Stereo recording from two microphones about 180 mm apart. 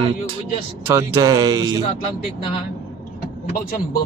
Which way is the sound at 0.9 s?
15° right (ahead or behind).